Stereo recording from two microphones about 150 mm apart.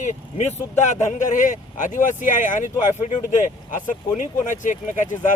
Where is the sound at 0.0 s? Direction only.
50° left (ahead or behind).